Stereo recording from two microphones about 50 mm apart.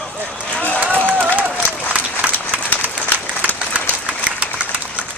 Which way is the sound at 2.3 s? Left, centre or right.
Left.